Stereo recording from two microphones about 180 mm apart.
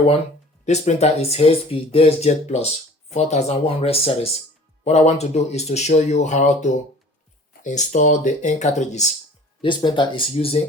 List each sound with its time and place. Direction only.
0.6 s speech: 40° left (ahead or behind)
9.6 s speech: 25° left (ahead or behind)